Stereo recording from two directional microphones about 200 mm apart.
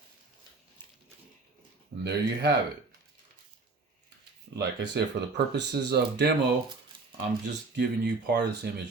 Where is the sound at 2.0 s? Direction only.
55° right (ahead or behind).